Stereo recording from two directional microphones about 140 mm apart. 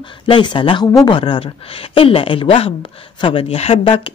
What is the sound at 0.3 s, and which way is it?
Speech, 35° left (ahead or behind).